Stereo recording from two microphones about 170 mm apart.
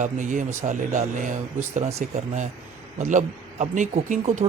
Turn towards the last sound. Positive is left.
turn(degrees=-45)  # may be behind; listen again after turning